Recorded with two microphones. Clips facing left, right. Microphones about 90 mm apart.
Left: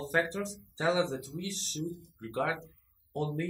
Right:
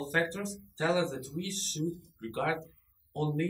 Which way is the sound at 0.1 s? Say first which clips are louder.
Left 2 dB; 15° left (ahead or behind).